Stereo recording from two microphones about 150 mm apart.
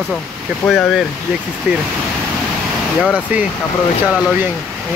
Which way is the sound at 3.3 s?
10° right (ahead or behind).